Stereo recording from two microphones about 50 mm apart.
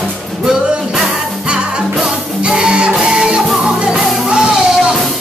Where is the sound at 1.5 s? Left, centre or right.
Centre.